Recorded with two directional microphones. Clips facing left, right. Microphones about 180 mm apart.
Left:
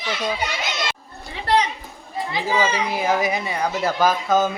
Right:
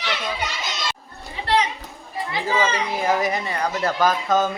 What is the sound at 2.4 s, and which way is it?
Speech, 10° left (ahead or behind).